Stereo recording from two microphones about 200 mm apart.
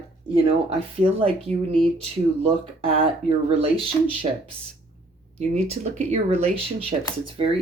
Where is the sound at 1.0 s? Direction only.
30° right (ahead or behind).